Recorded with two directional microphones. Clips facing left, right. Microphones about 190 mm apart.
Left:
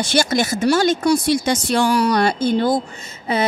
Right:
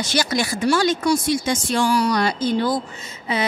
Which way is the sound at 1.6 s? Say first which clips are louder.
Left 1 dB; 65° left (ahead or behind).